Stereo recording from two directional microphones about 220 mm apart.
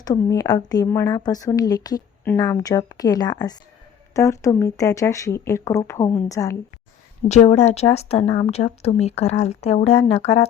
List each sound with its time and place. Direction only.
0.0 s speech: 15° left (ahead or behind)
7.3 s a woman's voice: 30° left (ahead or behind)